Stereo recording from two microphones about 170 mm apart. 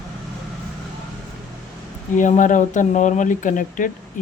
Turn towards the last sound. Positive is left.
turn(degrees=50)  # may be behind; listen again after turning